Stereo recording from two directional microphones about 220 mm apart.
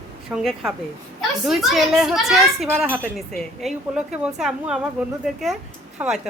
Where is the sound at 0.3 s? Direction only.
Centre (ahead or behind).